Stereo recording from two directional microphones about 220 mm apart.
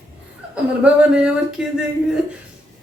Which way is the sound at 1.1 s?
5° right (ahead or behind).